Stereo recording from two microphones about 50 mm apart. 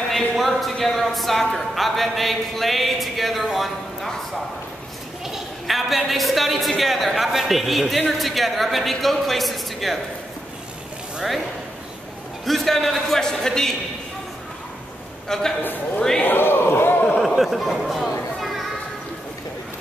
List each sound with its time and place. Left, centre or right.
0.1 s speech: centre
5.2 s a woman's voice: centre
12.4 s speech: centre
15.2 s a man's voice: centre
15.6 s a man's voice: left
17.4 s speech: centre